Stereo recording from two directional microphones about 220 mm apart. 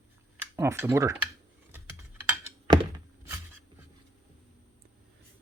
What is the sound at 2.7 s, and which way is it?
Thunk, 20° right (ahead or behind).